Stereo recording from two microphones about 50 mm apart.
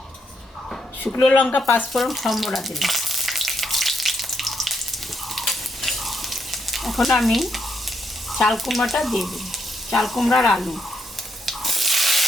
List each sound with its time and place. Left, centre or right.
1.3 s speech: left
1.9 s frying: centre
8.3 s speech: centre
11.4 s sanding: centre